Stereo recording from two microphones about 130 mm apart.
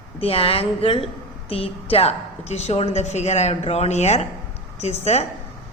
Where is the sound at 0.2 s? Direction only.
45° left (ahead or behind).